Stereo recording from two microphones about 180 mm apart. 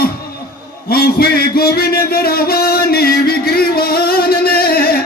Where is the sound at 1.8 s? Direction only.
60° left (ahead or behind).